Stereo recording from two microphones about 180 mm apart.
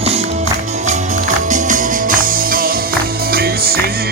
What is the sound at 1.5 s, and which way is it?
Music, 45° right (ahead or behind).